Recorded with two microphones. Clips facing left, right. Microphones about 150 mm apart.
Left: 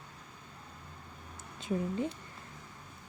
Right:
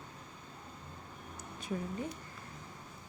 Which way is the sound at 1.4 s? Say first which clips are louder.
Left 5 dB; 25° left (ahead or behind).